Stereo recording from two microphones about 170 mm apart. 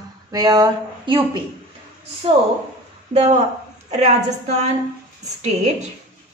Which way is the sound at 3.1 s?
40° right (ahead or behind).